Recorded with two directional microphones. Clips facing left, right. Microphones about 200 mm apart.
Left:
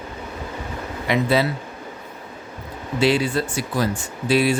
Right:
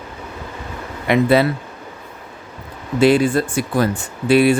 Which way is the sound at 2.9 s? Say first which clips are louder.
Right 6 dB; 50° right (ahead or behind).